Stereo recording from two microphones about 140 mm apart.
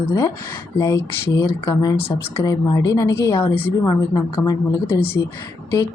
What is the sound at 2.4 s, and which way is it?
A woman's voice, 25° left (ahead or behind).